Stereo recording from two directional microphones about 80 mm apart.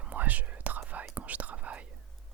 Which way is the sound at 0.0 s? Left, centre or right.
Centre.